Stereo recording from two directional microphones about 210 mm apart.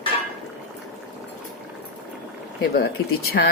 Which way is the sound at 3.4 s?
50° left (ahead or behind).